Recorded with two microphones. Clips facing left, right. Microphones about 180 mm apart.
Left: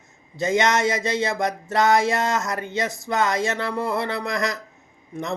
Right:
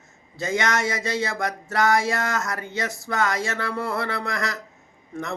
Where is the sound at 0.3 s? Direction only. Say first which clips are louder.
Left 4 dB; 20° left (ahead or behind).